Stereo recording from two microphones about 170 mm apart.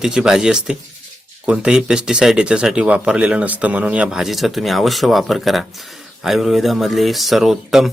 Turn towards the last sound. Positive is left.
turn(degrees=0)  # may be behind; listen again after turning